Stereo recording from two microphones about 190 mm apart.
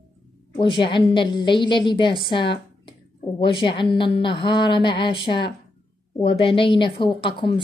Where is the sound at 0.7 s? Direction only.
25° left (ahead or behind).